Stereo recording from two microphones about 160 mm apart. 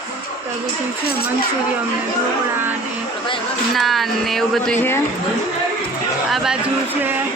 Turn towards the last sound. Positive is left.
turn(degrees=0)  # may be behind; listen again after turning